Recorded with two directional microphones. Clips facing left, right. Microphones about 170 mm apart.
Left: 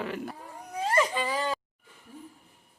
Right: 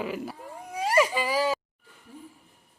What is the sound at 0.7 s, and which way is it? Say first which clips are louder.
Whimper: right 3 dB; 10° right (ahead or behind).